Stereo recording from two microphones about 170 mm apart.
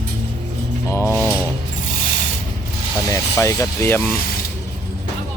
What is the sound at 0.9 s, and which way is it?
Mechanisms, 15° left (ahead or behind).